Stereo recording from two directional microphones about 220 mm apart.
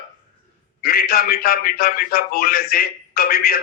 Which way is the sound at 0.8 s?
40° left (ahead or behind).